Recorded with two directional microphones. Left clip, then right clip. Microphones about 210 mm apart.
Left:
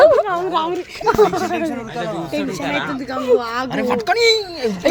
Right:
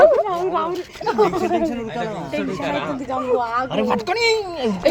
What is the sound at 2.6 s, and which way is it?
Speech, 35° left (ahead or behind).